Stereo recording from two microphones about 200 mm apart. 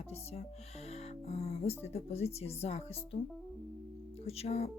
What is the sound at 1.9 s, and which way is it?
Speech, 30° left (ahead or behind).